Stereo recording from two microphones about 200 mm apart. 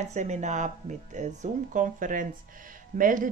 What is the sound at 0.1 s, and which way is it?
Speech, 35° right (ahead or behind).